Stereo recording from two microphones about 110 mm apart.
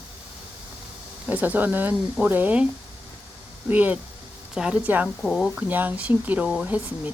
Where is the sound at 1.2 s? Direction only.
15° right (ahead or behind).